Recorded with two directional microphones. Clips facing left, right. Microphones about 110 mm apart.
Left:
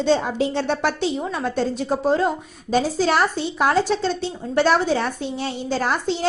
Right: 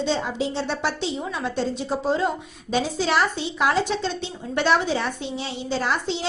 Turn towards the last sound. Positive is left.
turn(degrees=45)  # may be behind; listen again after turning